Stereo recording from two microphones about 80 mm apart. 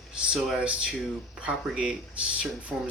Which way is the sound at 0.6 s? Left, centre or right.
Centre.